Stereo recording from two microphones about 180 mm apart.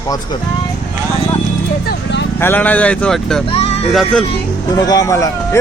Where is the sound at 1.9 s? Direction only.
75° left (ahead or behind).